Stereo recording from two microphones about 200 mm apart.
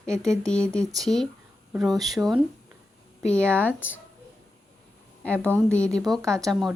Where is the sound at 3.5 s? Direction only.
10° left (ahead or behind).